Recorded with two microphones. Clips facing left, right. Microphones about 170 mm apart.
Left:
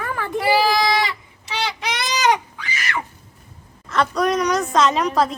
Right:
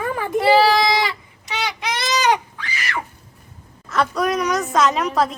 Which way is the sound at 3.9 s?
Centre (ahead or behind).